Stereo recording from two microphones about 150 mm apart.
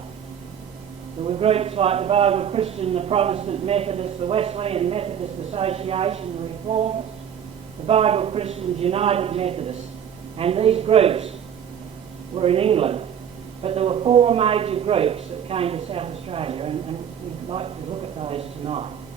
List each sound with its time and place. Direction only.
1.2 s a man's voice: 40° right (ahead or behind)
12.4 s a man's voice: 40° right (ahead or behind)
18.2 s a man's voice: 40° right (ahead or behind)